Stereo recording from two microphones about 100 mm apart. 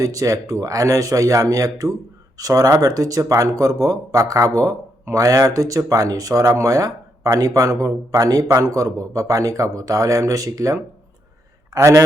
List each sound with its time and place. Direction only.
0.0 s speech: 35° right (ahead or behind)